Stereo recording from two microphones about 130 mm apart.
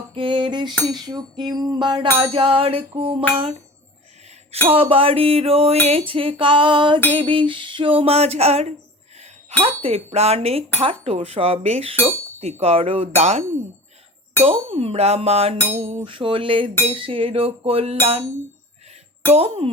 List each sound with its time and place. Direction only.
0.1 s a sound: 40° right (ahead or behind)
3.3 s music: 55° right (ahead or behind)
4.6 s music: 45° right (ahead or behind)
9.1 s speech: 55° right (ahead or behind)
10.8 s music: 50° right (ahead or behind)
14.4 s music: 45° right (ahead or behind)
15.8 s a sound: 50° right (ahead or behind)
16.9 s music: 45° right (ahead or behind)
19.3 s music: 50° right (ahead or behind)